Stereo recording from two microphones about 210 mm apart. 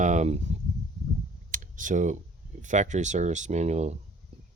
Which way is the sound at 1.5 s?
40° right (ahead or behind).